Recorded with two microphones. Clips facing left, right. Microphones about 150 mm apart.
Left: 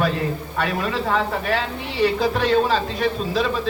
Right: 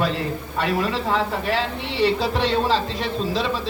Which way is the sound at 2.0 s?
25° right (ahead or behind).